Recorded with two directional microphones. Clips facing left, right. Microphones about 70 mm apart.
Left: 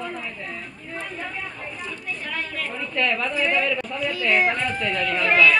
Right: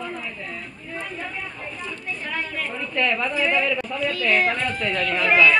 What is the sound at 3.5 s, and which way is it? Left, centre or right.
Speech, centre.